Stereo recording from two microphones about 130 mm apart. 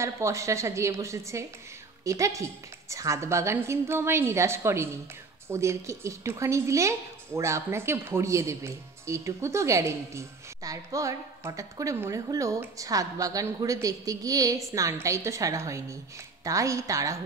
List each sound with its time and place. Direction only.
0.0 s a woman's voice: 20° right (ahead or behind)